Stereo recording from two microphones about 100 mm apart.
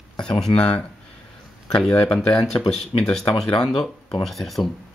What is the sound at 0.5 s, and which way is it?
Speech, 70° left (ahead or behind).